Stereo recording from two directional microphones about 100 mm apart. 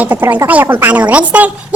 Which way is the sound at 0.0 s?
20° right (ahead or behind).